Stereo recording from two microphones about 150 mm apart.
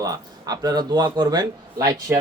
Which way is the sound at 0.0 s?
25° right (ahead or behind).